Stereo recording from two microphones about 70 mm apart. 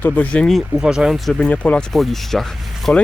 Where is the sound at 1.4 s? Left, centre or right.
Centre.